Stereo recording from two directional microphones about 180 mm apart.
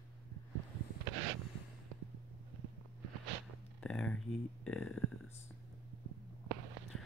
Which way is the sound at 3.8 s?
5° left (ahead or behind).